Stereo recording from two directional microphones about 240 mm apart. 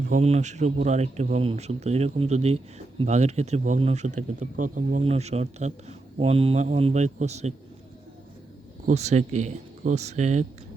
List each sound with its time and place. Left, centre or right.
0.1 s speech: right
8.9 s speech: right